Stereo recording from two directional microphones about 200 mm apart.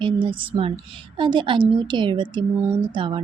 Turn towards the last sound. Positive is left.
turn(degrees=-25)  # may be behind; listen again after turning